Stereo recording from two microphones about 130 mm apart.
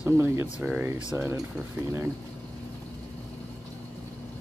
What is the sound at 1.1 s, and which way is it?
Speech, 20° right (ahead or behind).